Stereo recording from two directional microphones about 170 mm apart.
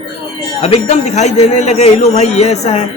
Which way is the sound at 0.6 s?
40° left (ahead or behind).